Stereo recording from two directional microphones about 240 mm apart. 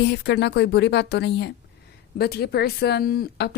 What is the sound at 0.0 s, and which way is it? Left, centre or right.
Speech, left.